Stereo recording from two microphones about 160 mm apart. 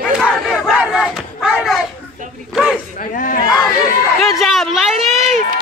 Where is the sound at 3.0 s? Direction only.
55° left (ahead or behind).